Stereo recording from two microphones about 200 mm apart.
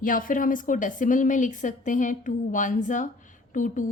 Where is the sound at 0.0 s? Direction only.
40° left (ahead or behind).